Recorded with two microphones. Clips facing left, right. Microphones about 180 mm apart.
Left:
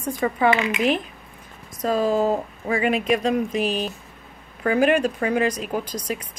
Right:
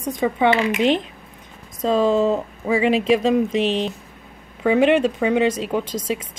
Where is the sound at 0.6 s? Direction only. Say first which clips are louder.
Right 3 dB; 30° right (ahead or behind).